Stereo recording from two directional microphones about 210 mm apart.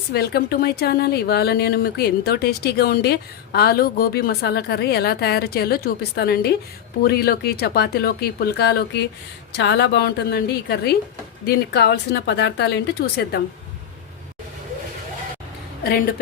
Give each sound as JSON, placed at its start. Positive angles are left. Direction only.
{"t": 0.1, "sound": "speech", "side_deg": 50}